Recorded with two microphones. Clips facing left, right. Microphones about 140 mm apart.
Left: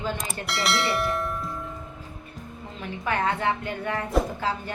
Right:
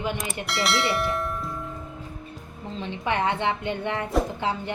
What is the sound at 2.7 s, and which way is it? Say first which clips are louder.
A woman's voice: right 1 dB; 25° right (ahead or behind).